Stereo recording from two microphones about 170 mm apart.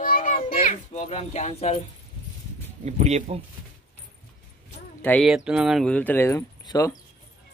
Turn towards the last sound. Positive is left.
turn(degrees=20)  # may be behind; listen again after turning